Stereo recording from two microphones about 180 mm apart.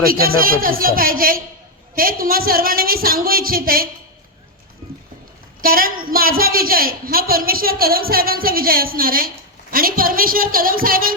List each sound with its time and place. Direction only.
0.0 s a woman's voice: 55° right (ahead or behind)
5.6 s a woman's voice: 55° right (ahead or behind)